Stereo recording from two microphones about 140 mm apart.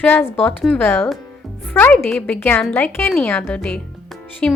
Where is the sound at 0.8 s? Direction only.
15° left (ahead or behind).